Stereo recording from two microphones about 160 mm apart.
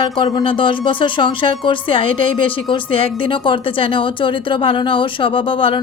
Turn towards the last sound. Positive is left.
turn(degrees=35)  # may be behind; listen again after turning